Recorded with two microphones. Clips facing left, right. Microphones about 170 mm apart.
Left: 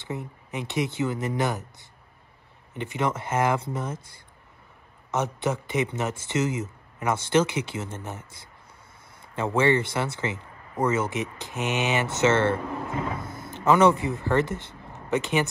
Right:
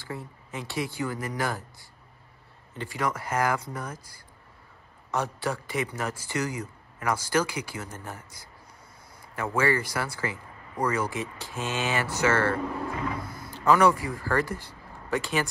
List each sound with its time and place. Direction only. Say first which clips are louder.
0.0 s speech: left 4 dB; 20° left (ahead or behind)